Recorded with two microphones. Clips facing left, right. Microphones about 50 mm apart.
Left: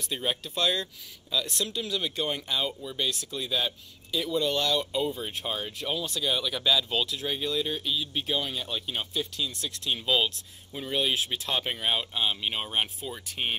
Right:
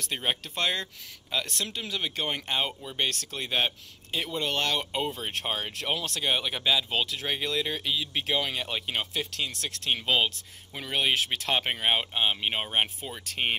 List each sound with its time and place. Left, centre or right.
0.0 s speech: right
3.0 s speech: right
5.1 s speech: right
6.3 s speech: right
6.6 s speech: right
7.2 s speech: right
10.0 s speech: right
10.7 s speech: right
13.3 s speech: right